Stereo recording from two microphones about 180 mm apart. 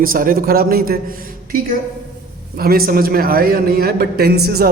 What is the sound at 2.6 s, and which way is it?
A man's voice, 55° right (ahead or behind).